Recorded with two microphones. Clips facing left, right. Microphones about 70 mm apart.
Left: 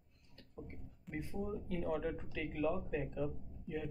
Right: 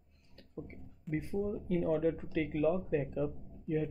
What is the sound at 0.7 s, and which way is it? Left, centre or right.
Music, centre.